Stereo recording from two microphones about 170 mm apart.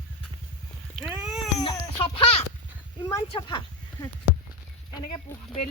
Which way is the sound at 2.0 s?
35° left (ahead or behind).